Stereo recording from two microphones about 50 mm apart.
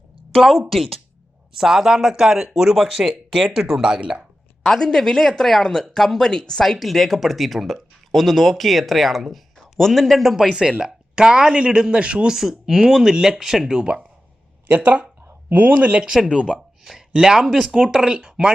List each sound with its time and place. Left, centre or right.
0.7 s speech: centre
4.6 s speech: centre
12.4 s speech: centre
13.7 s speech: centre
14.7 s speech: right
16.6 s a sound: centre
17.1 s speech: centre